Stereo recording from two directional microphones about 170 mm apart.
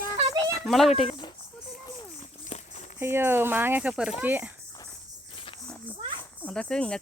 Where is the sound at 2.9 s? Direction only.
15° right (ahead or behind).